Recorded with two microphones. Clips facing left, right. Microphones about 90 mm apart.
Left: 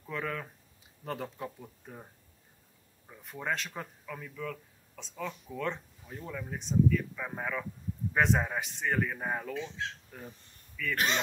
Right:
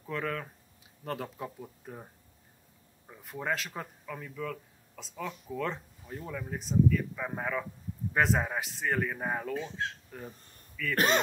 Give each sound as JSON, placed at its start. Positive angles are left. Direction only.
{"t": 0.0, "sound": "speech", "side_deg": 0}
{"t": 3.1, "sound": "speech", "side_deg": -5}
{"t": 9.5, "sound": "speech", "side_deg": -45}
{"t": 10.8, "sound": "speech", "side_deg": 0}